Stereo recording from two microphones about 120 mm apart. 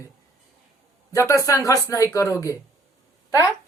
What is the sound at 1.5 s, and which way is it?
Speech, 25° left (ahead or behind).